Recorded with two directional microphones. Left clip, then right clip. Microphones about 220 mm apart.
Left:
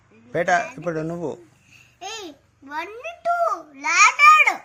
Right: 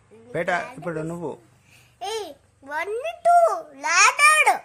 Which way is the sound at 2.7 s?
55° right (ahead or behind).